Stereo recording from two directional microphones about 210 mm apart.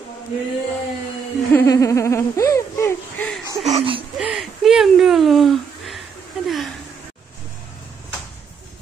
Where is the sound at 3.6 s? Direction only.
30° right (ahead or behind).